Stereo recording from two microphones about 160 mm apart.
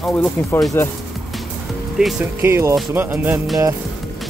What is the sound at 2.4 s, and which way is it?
Speech, 15° right (ahead or behind).